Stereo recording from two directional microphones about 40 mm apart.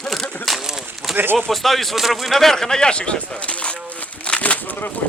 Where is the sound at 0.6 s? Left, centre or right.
Centre.